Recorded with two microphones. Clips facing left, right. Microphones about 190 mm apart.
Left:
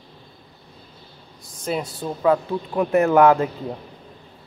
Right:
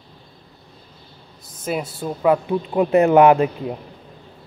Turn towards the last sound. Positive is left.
turn(degrees=-15)  # may be behind; listen again after turning